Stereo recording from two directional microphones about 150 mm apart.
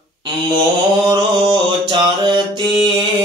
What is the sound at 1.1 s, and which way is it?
Mantra, 30° right (ahead or behind).